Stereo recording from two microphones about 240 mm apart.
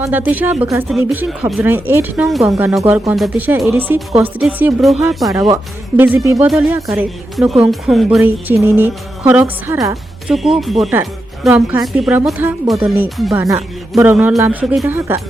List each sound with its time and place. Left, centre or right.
0.0 s a woman's voice: centre